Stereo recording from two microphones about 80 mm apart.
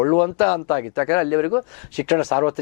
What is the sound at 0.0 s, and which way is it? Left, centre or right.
Speech, centre.